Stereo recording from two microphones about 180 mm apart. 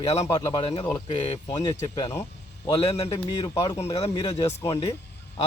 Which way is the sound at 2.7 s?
30° left (ahead or behind).